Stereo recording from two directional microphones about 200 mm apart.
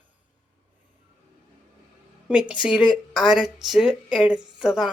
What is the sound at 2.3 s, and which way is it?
Speech, 5° right (ahead or behind).